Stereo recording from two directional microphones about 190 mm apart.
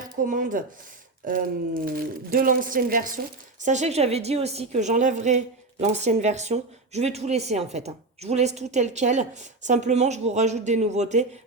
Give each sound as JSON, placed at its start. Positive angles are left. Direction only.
{"t": 0.0, "sound": "speech", "side_deg": -45}